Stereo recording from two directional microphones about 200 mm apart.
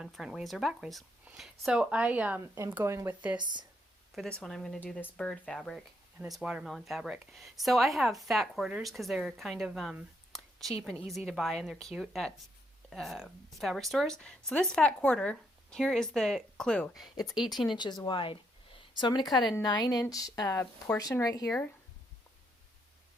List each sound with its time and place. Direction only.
0.0 s speech: centre (ahead or behind); by 3.7 s 20° right (ahead or behind)
4.1 s speech: centre (ahead or behind)
17.7 s speech: 20° left (ahead or behind)